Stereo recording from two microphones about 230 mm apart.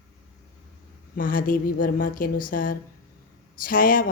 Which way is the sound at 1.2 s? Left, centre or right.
Left.